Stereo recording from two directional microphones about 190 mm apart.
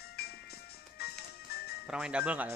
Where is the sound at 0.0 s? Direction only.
55° left (ahead or behind).